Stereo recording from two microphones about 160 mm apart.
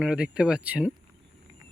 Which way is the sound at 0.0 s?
5° right (ahead or behind).